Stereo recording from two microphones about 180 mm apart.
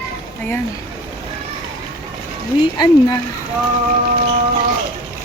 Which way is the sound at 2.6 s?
20° left (ahead or behind).